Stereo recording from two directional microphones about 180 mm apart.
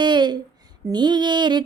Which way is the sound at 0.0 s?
25° right (ahead or behind).